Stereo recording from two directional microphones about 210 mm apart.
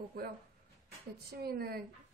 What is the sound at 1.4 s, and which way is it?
Speech, 45° right (ahead or behind).